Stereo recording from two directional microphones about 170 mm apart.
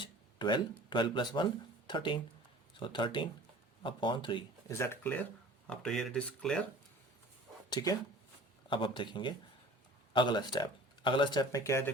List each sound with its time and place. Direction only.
0.0 s a sound: 25° left (ahead or behind)
0.9 s speech: 30° left (ahead or behind)
4.7 s speech: 15° left (ahead or behind)
7.7 s speech: 20° left (ahead or behind)